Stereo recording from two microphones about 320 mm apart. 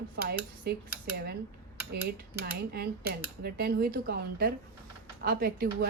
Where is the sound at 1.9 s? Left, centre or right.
Right.